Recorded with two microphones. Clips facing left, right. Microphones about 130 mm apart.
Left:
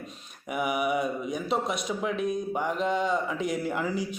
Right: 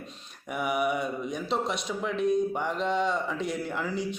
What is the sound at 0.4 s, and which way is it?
Speech, 5° left (ahead or behind).